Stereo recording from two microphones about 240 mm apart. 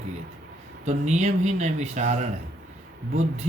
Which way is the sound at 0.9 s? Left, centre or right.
Right.